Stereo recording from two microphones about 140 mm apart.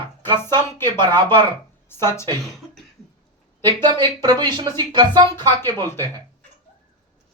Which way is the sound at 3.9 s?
30° right (ahead or behind).